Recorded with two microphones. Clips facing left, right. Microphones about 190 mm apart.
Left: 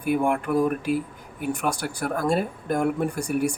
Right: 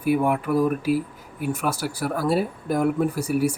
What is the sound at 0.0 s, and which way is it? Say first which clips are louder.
Speech: right 2 dB; 5° right (ahead or behind).